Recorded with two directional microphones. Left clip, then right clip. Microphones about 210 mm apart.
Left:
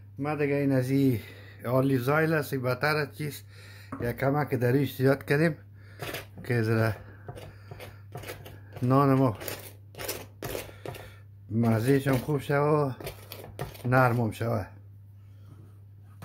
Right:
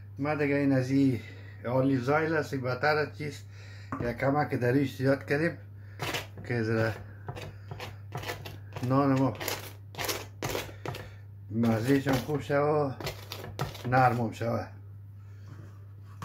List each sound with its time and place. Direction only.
0.2 s speech: 45° left (ahead or behind)
8.8 s speech: 55° left (ahead or behind)
9.9 s a sound: 5° right (ahead or behind)
11.1 s speech: 55° left (ahead or behind)